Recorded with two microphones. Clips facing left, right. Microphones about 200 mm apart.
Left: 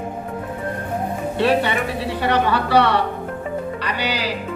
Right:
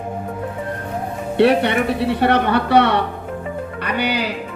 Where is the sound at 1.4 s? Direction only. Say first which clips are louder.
Right 5 dB; 60° right (ahead or behind).